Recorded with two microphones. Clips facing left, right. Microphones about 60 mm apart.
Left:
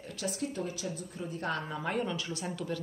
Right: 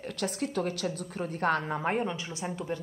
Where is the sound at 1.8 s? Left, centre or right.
Right.